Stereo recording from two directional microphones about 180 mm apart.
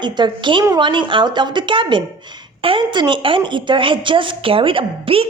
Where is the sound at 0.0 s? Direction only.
25° right (ahead or behind).